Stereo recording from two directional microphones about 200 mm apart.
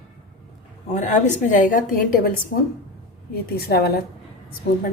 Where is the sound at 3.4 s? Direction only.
50° left (ahead or behind).